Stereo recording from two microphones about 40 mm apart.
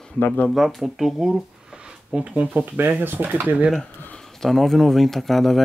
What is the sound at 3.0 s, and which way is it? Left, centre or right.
Speech, right.